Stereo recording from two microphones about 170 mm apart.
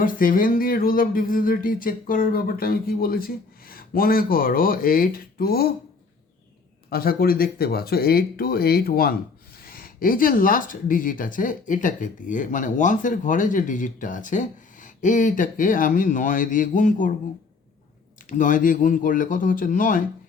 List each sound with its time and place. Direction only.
0.0 s speech: 55° left (ahead or behind)
6.9 s speech: 60° left (ahead or behind)
18.2 s speech: 50° left (ahead or behind)